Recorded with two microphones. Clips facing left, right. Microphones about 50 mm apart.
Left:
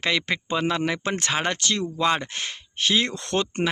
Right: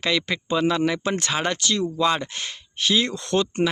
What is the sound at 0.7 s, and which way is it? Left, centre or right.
Speech, left.